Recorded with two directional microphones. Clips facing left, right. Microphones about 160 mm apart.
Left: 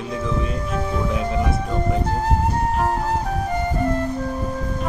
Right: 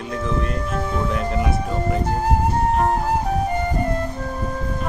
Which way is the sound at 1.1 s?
Centre (ahead or behind).